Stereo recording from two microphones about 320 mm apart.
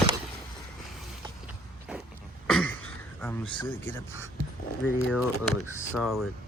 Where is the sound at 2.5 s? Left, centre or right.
Centre.